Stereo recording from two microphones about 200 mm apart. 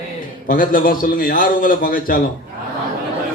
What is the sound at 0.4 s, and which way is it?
A man's voice, 45° left (ahead or behind).